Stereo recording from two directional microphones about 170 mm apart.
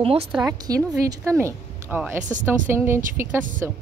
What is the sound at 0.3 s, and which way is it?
Speech, 10° right (ahead or behind).